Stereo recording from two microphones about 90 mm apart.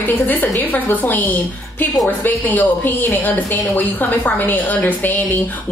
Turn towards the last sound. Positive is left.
turn(degrees=20)  # may be behind; listen again after turning